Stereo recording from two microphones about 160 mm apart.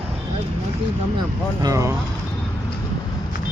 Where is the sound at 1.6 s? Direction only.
20° right (ahead or behind).